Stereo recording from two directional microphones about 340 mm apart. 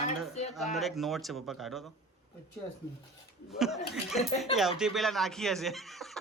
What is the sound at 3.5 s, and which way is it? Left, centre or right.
Speech, centre.